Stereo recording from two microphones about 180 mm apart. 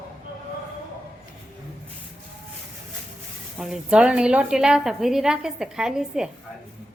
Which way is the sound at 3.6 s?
5° right (ahead or behind).